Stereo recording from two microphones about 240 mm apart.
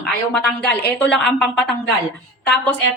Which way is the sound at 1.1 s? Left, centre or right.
Centre.